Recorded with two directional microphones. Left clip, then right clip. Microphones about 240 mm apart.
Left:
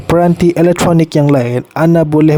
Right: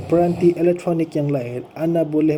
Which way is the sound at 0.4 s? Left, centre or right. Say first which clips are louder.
Left 7 dB; left.